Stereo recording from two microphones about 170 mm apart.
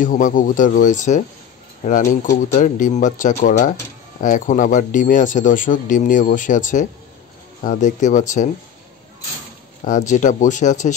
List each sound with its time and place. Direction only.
0.0 s a man's voice: 50° left (ahead or behind)
2.5 s a man's voice: 45° left (ahead or behind)
9.8 s a man's voice: 45° left (ahead or behind)